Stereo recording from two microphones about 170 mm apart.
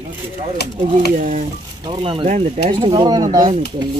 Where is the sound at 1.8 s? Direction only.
30° right (ahead or behind).